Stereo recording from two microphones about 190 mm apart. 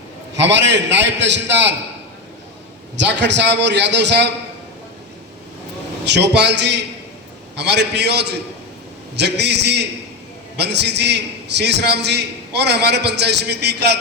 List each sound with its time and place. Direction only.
0.3 s a man's voice: 70° right (ahead or behind)
3.0 s a man's voice: 70° right (ahead or behind)
6.1 s a man's voice: 65° right (ahead or behind)